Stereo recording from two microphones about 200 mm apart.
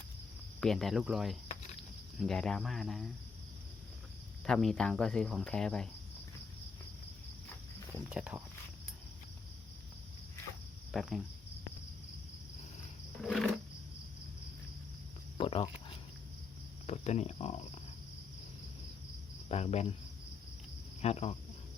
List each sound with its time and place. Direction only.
0.6 s speech: centre (ahead or behind)
4.4 s speech: centre (ahead or behind)
8.1 s speech: 5° right (ahead or behind)
10.9 s speech: centre (ahead or behind)
13.2 s roar: centre (ahead or behind)
15.4 s speech: 25° left (ahead or behind)
16.8 s speech: 35° left (ahead or behind)
19.5 s speech: 30° left (ahead or behind)
21.0 s speech: 30° left (ahead or behind)